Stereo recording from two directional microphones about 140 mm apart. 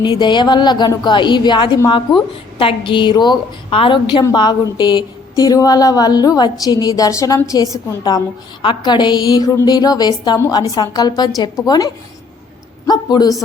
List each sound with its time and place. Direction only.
0.0 s a woman's voice: 30° left (ahead or behind)
12.9 s a woman's voice: 30° left (ahead or behind)